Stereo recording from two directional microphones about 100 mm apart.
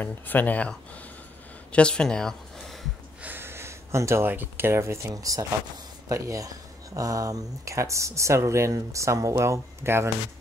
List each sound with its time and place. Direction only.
0.0 s speech: 15° left (ahead or behind)
3.2 s speech: 20° right (ahead or behind)